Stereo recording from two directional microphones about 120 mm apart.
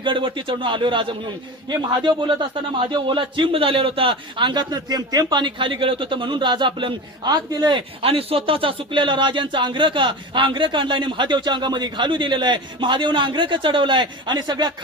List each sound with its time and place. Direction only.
0.0 s a man's voice: 40° right (ahead or behind)
8.0 s speech: 50° right (ahead or behind); by 14.7 s 35° right (ahead or behind)